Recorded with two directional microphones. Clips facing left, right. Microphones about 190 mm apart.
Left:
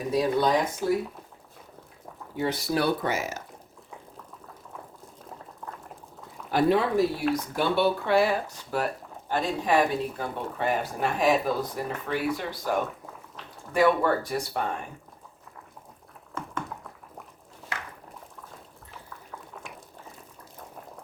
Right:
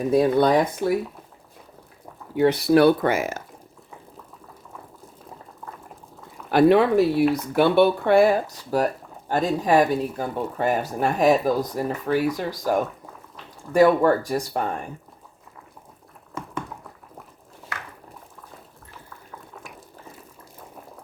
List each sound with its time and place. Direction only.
0.1 s speech: 55° right (ahead or behind)
2.3 s speech: 65° right (ahead or behind)
6.5 s speech: 70° right (ahead or behind); by 14.6 s 40° right (ahead or behind)